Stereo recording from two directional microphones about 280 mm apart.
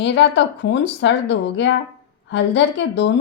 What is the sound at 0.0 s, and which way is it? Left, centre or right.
A woman's voice, left.